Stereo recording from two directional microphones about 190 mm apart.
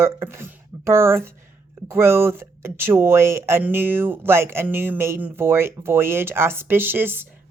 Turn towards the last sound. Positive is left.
turn(degrees=-10)  # may be behind; listen again after turning